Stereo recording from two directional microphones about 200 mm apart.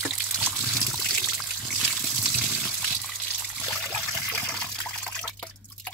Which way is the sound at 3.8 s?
5° left (ahead or behind).